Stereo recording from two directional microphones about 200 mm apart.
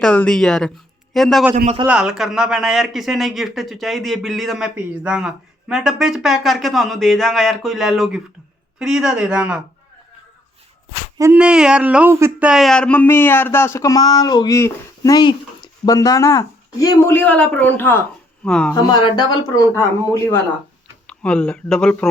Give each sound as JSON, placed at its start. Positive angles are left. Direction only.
{"t": 0.0, "sound": "speech", "side_deg": 5}
{"t": 1.6, "sound": "a man's voice", "side_deg": -25}
{"t": 1.9, "sound": "speech", "side_deg": -5}
{"t": 11.2, "sound": "speech", "side_deg": -5}
{"t": 18.7, "sound": "speech", "side_deg": 20}